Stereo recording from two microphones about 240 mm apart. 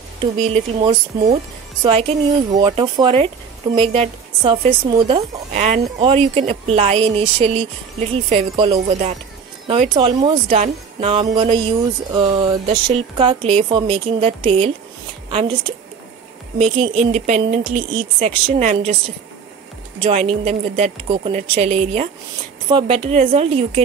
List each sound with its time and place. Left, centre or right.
0.4 s a woman's voice: right
16.5 s a woman's voice: centre
16.8 s a woman's voice: right